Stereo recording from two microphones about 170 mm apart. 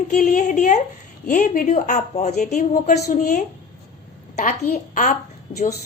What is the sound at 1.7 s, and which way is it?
A woman's voice, 45° left (ahead or behind).